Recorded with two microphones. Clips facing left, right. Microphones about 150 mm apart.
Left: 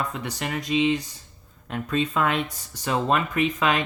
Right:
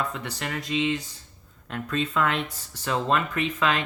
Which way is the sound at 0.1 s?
15° left (ahead or behind).